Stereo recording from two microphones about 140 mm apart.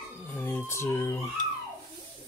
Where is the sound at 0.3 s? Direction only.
10° left (ahead or behind).